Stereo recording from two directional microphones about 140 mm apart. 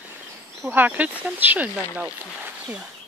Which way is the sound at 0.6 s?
10° right (ahead or behind).